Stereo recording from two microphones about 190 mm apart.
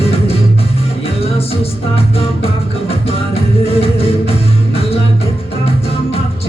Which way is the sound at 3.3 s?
30° left (ahead or behind).